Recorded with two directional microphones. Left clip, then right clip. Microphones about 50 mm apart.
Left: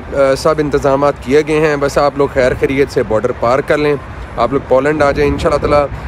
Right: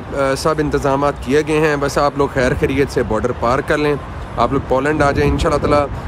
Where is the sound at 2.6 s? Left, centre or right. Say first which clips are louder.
Left 4 dB; right.